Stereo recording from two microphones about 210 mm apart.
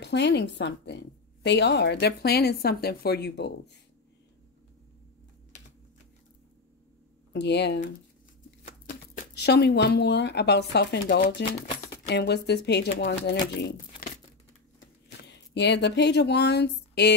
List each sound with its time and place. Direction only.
0.0 s a woman's voice: 55° left (ahead or behind)
7.3 s a woman's voice: 55° left (ahead or behind)
9.1 s a woman's voice: 45° left (ahead or behind)
15.0 s speech: 55° left (ahead or behind)